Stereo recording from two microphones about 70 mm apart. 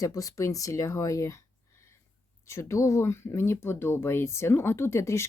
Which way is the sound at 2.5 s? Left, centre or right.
Left.